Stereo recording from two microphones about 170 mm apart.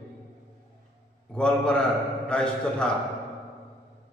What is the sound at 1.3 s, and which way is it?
A man's voice, 5° left (ahead or behind).